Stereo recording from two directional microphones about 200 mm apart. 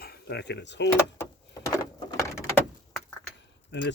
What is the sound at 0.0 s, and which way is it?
Speech, 55° left (ahead or behind).